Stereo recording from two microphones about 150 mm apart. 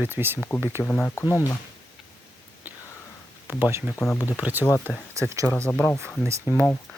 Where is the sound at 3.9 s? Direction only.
20° left (ahead or behind).